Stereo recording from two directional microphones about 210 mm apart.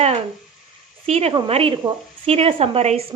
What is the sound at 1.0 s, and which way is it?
A woman's voice, 30° right (ahead or behind).